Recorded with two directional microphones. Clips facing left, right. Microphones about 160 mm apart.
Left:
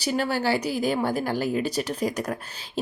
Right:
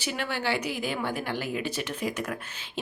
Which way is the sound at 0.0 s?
40° left (ahead or behind).